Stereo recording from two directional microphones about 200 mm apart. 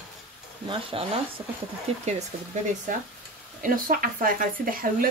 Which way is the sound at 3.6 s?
45° right (ahead or behind).